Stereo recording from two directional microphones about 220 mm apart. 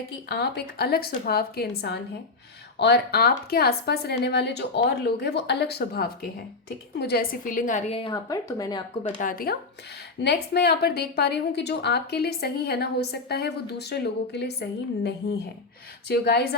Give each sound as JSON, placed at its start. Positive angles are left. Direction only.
{"t": 0.3, "sound": "a woman's voice", "side_deg": 50}
{"t": 9.0, "sound": "a woman's voice", "side_deg": 35}